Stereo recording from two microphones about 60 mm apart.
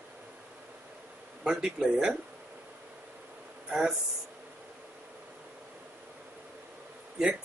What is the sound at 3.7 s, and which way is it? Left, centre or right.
Speech, centre.